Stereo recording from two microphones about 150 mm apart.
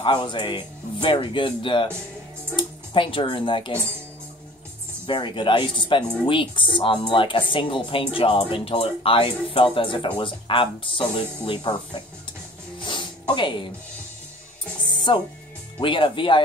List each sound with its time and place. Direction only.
0.0 s speech: 30° left (ahead or behind)
5.0 s speech: 35° left (ahead or behind)
12.8 s music: 30° left (ahead or behind)
15.1 s speech: 35° left (ahead or behind)